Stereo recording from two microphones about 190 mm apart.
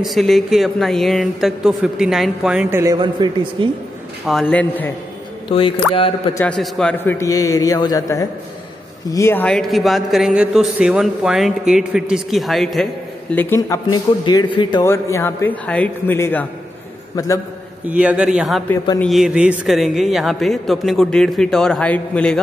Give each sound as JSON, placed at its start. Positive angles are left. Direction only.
{"t": 0.0, "sound": "a man's voice", "side_deg": 0}
{"t": 2.8, "sound": "a man's voice", "side_deg": -20}
{"t": 4.3, "sound": "a man's voice", "side_deg": 5}
{"t": 5.5, "sound": "a man's voice", "side_deg": 30}
{"t": 6.3, "sound": "a man's voice", "side_deg": 5}
{"t": 14.9, "sound": "a man's voice", "side_deg": 15}
{"t": 17.8, "sound": "a man's voice", "side_deg": -5}